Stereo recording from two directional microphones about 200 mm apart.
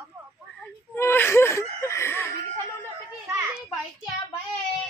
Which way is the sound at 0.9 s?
10° left (ahead or behind).